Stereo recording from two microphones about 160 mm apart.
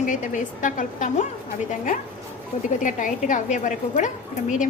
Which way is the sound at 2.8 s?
55° left (ahead or behind).